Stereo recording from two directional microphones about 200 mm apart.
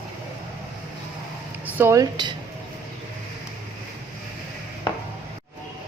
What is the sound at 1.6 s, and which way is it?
Speech, 15° right (ahead or behind).